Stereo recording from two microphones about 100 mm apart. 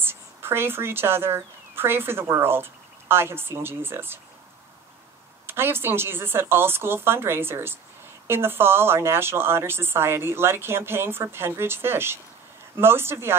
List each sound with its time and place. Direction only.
0.0 s speech: 25° right (ahead or behind)
5.5 s a woman's voice: 25° right (ahead or behind)